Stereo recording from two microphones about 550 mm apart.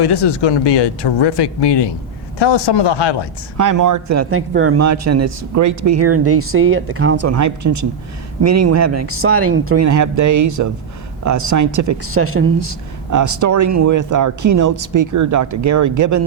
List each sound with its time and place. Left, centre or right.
0.0 s speech: left
3.6 s speech: right